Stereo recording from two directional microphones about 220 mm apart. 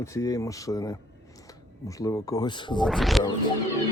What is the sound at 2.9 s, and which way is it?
Speech, centre (ahead or behind).